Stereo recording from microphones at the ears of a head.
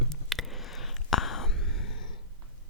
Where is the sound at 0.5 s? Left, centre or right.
Left.